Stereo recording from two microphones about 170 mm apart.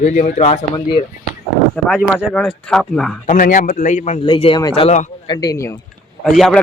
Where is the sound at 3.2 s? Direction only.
50° left (ahead or behind).